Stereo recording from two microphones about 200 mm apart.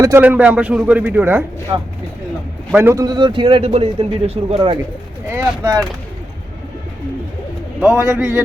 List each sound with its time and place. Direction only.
0.0 s a man's voice: 10° right (ahead or behind)
1.7 s a man's voice: 20° right (ahead or behind)
5.3 s a man's voice: 15° right (ahead or behind)
7.8 s a man's voice: 10° right (ahead or behind)